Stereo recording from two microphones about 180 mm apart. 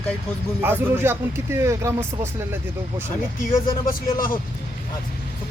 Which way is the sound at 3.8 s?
50° left (ahead or behind).